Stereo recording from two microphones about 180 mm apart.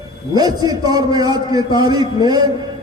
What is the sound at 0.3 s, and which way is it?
A man's voice, 20° right (ahead or behind).